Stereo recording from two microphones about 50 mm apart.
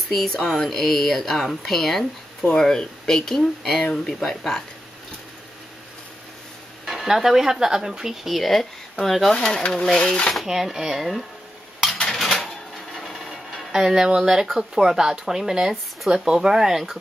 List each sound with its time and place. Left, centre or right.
0.5 s speech: centre
6.9 s speech: centre
9.3 s speech: centre
10.4 s speech: centre
11.8 s dishes: centre
12.2 s a sound: centre
13.8 s speech: centre